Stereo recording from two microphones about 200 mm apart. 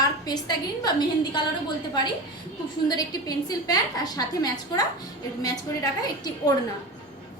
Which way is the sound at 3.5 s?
20° left (ahead or behind).